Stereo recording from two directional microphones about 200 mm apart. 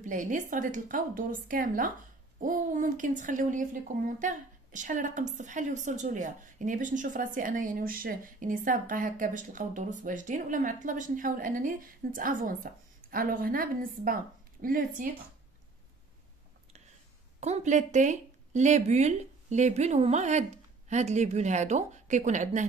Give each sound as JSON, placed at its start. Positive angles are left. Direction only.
{"t": 0.0, "sound": "a woman's voice", "side_deg": -40}
{"t": 17.4, "sound": "speech", "side_deg": -35}